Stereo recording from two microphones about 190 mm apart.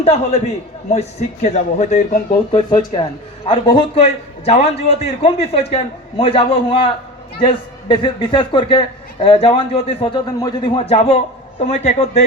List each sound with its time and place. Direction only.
0.0 s a man's voice: 30° left (ahead or behind)
2.5 s a man's voice: 25° left (ahead or behind)